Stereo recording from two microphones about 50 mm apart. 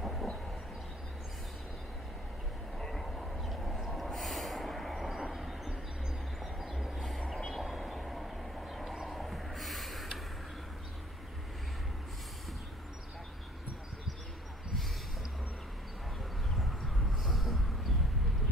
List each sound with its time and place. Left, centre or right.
0.0 s train: centre
2.8 s vehicle: centre
3.9 s train: centre
7.0 s vehicle: centre
8.9 s a sound: centre
17.2 s vehicle: centre